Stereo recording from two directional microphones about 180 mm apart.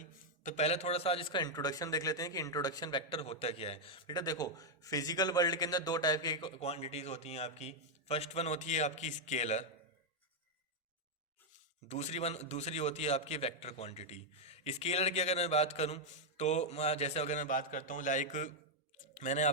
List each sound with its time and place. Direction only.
0.4 s a man's voice: 35° left (ahead or behind); by 6.5 s 20° left (ahead or behind)
6.6 s a man's voice: 35° left (ahead or behind)
11.9 s a man's voice: 40° left (ahead or behind)